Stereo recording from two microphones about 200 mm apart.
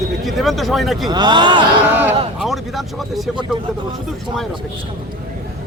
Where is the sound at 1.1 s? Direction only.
20° right (ahead or behind).